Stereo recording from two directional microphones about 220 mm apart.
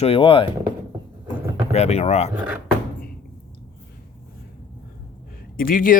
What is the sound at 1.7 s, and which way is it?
Speech, 30° left (ahead or behind).